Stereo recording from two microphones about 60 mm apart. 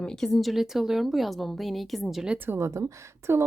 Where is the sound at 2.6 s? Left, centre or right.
Right.